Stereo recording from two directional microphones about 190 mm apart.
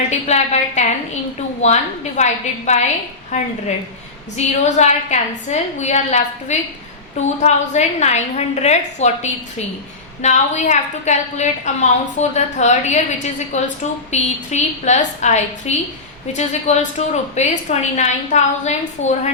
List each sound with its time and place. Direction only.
0.1 s a woman's voice: 35° left (ahead or behind)